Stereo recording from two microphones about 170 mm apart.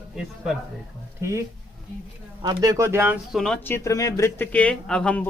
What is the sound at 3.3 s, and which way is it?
Speech, 5° left (ahead or behind).